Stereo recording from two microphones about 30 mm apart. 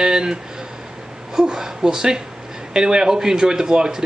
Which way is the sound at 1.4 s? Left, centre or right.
Right.